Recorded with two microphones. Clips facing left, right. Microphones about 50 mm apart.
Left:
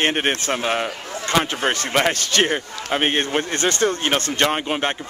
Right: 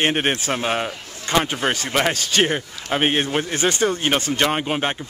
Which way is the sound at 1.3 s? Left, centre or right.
Centre.